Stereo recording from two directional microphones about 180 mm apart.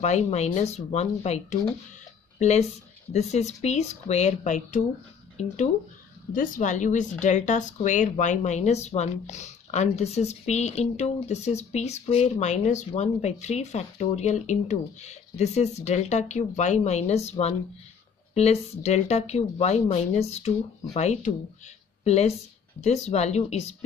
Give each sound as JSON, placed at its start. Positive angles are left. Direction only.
{"t": 0.0, "sound": "speech", "side_deg": 40}
{"t": 6.3, "sound": "speech", "side_deg": 45}